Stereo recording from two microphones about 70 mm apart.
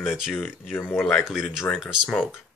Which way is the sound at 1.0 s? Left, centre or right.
Centre.